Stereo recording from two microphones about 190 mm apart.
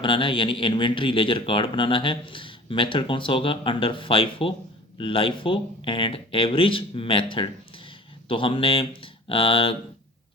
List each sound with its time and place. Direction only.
0.0 s speech: 25° left (ahead or behind)